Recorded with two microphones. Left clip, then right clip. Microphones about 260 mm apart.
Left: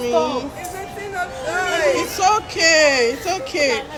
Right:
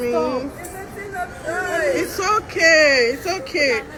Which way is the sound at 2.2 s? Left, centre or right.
Centre.